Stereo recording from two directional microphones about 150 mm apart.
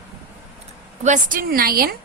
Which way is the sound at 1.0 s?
60° right (ahead or behind).